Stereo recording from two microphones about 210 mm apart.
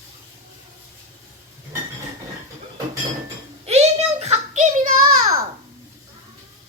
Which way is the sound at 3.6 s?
30° right (ahead or behind).